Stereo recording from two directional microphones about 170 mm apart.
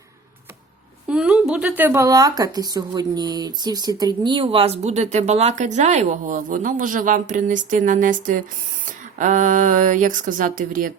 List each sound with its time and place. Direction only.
1.0 s speech: 5° right (ahead or behind); by 10.9 s 55° right (ahead or behind)